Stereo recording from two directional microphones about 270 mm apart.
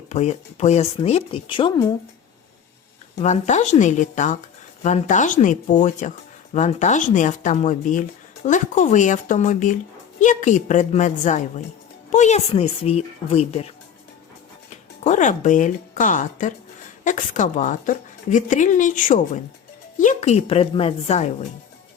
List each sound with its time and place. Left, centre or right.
0.1 s a woman's voice: left
3.2 s a woman's voice: left
15.0 s a woman's voice: left